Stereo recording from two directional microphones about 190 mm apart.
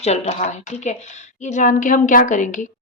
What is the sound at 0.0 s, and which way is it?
A woman's voice, 35° left (ahead or behind).